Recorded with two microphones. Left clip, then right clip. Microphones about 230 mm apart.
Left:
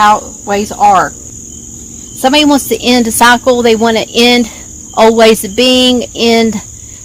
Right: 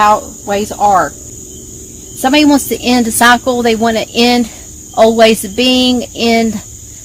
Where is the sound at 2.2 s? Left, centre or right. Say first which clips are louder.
Left 1 dB; left.